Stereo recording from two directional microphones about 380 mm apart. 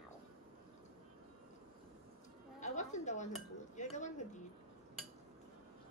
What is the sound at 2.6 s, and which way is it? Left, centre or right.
Chatter, centre.